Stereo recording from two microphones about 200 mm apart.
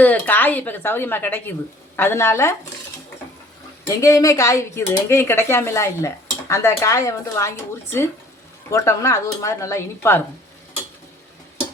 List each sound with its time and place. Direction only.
0.0 s speech: 10° left (ahead or behind)
3.8 s speech: 15° left (ahead or behind)